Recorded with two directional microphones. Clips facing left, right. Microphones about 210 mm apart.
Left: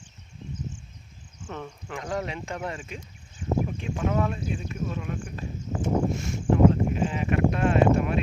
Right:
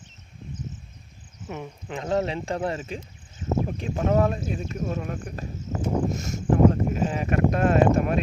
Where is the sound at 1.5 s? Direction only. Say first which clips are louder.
Right 2 dB; 15° right (ahead or behind).